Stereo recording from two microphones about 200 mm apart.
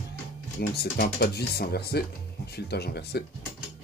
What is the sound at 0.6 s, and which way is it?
Speech, 50° left (ahead or behind).